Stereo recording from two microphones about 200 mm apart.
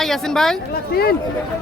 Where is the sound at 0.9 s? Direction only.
50° left (ahead or behind).